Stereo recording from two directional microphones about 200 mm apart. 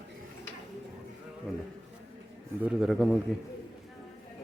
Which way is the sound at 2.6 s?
5° right (ahead or behind).